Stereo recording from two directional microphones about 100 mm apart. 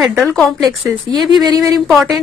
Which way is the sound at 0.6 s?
45° right (ahead or behind).